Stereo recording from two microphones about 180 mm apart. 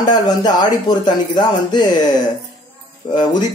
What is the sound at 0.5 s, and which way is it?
A man's voice, 25° left (ahead or behind).